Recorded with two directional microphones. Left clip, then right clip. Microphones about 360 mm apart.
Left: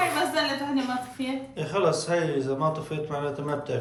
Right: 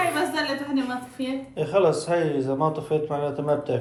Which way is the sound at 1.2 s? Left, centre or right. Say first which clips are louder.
Right 3 dB; centre.